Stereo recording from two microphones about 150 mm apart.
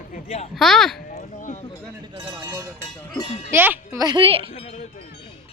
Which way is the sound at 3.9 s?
30° right (ahead or behind).